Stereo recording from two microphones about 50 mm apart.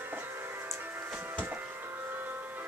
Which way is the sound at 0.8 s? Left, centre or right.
Right.